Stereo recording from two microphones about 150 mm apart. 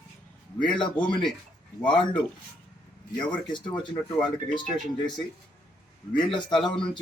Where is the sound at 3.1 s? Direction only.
30° left (ahead or behind).